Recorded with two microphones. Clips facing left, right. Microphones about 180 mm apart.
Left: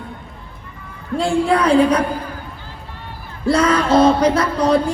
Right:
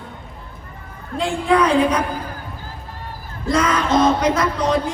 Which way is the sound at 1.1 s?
35° left (ahead or behind).